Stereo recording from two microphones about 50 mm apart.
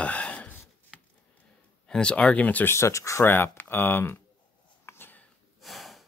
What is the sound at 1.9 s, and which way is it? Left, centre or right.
Speech, centre.